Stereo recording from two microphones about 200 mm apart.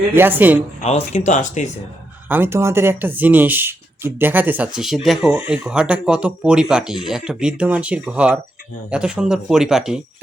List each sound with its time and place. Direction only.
0.1 s speech: 10° right (ahead or behind)
0.8 s speech: 35° left (ahead or behind)
2.3 s speech: 10° right (ahead or behind)